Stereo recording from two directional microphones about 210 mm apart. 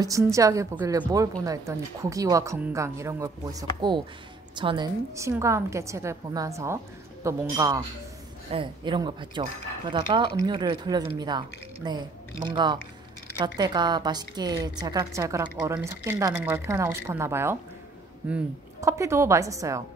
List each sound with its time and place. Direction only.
0.0 s a woman's voice: 15° right (ahead or behind)